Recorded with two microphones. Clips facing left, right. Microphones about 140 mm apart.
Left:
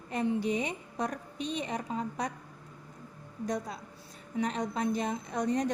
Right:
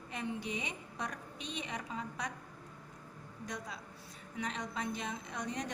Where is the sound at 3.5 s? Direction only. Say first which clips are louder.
Left 10 dB; 40° left (ahead or behind).